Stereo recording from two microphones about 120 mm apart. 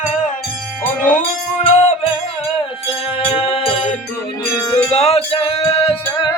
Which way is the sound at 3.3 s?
50° left (ahead or behind).